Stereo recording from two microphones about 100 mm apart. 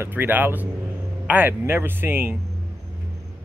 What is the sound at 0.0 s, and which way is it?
Speech, 20° right (ahead or behind).